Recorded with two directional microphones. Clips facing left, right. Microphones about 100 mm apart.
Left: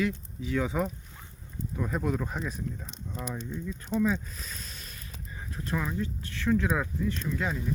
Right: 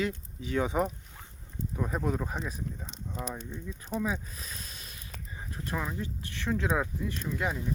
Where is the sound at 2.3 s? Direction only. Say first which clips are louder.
Left 2 dB; 5° right (ahead or behind).